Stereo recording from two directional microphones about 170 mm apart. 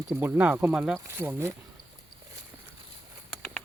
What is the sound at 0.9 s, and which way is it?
Speech, 15° right (ahead or behind).